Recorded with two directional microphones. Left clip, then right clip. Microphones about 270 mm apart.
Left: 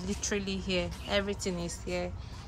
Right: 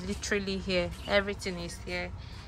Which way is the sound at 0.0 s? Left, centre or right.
Centre.